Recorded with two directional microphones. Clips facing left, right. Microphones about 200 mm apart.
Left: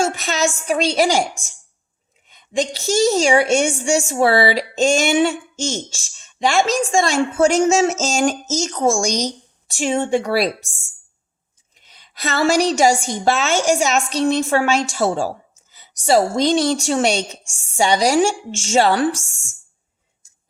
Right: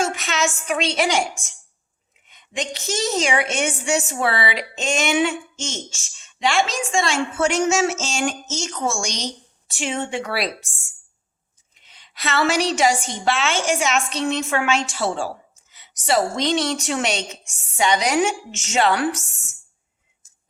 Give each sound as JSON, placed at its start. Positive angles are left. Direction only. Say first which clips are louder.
{"t": 0.0, "sound": "a woman's voice", "louder": "left 3 dB", "side_deg": 35}
{"t": 11.8, "sound": "a woman's voice", "louder": "left 4 dB", "side_deg": 40}